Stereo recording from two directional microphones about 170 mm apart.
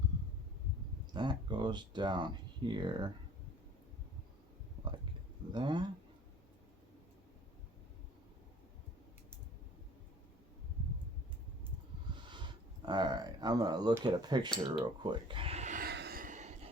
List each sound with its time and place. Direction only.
1.1 s speech: 25° right (ahead or behind)
5.5 s speech: 25° right (ahead or behind)
12.1 s speech: 25° right (ahead or behind); by 15.9 s 45° right (ahead or behind)
15.9 s a sound: 70° right (ahead or behind); by 16.6 s 45° right (ahead or behind)